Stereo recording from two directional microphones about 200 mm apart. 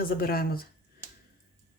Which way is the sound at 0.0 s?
50° left (ahead or behind).